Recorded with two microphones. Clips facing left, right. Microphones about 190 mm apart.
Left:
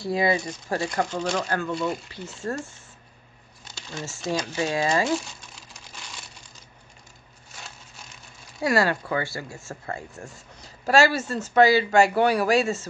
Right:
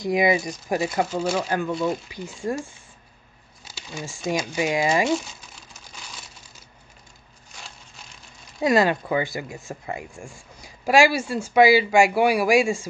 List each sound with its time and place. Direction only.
0.0 s speech: 15° right (ahead or behind); by 2.0 s centre (ahead or behind)
2.0 s speech: 15° right (ahead or behind)
3.6 s a sound: 10° right (ahead or behind)
4.6 s speech: 15° right (ahead or behind)
5.1 s crumpling: centre (ahead or behind)
7.5 s a sound: 5° left (ahead or behind)
8.5 s speech: 20° right (ahead or behind)